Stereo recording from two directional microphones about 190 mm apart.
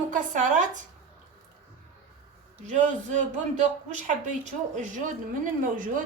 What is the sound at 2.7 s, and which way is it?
A woman's voice, 40° right (ahead or behind).